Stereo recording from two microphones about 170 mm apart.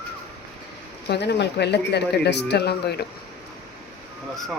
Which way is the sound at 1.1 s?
85° left.